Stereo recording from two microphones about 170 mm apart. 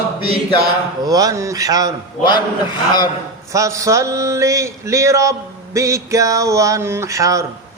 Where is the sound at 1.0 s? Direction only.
20° right (ahead or behind).